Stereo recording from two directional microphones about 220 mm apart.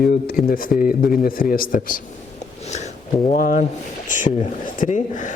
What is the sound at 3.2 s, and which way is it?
Speech, 35° left (ahead or behind).